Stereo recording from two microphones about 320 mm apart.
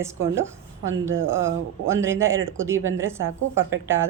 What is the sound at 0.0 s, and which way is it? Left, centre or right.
Speech, centre.